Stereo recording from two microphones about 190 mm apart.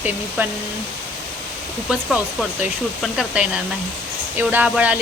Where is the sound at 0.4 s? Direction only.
10° right (ahead or behind).